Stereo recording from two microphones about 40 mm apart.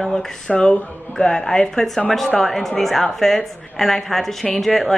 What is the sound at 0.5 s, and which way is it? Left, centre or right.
Speech, left.